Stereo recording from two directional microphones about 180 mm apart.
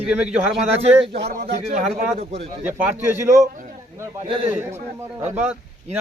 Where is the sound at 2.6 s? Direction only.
10° right (ahead or behind).